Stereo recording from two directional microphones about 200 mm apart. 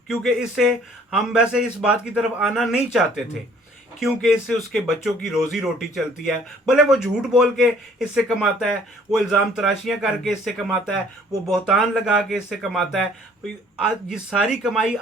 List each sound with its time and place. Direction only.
0.1 s speech: centre (ahead or behind)
4.0 s speech: centre (ahead or behind)